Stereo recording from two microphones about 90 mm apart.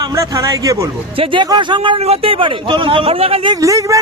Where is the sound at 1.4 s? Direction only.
60° right (ahead or behind); by 3.6 s 80° right.